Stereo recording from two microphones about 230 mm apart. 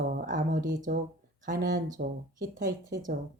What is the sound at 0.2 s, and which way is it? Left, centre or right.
Speech, right.